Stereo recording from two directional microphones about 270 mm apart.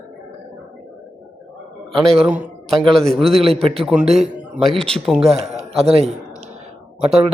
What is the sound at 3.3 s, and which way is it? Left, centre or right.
Speech, right.